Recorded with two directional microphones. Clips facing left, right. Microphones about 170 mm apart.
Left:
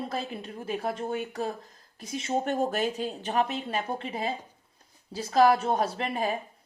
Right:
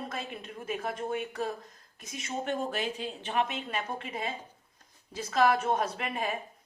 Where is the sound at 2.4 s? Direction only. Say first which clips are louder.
Left 1 dB; 40° left (ahead or behind).